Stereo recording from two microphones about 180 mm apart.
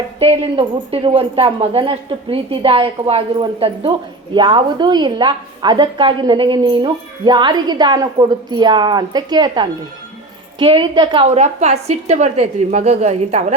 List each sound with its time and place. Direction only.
0.2 s a woman's voice: 30° right (ahead or behind)